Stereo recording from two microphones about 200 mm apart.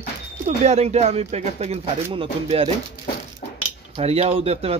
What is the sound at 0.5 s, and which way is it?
Speech, 30° right (ahead or behind).